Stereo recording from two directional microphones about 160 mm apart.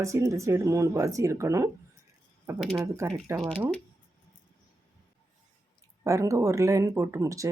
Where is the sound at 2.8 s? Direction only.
15° right (ahead or behind).